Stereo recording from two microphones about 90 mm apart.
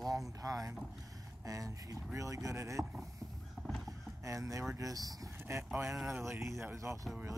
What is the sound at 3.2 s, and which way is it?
Horse, 35° right (ahead or behind).